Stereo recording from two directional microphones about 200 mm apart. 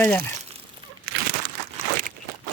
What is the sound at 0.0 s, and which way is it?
Speech, 5° left (ahead or behind).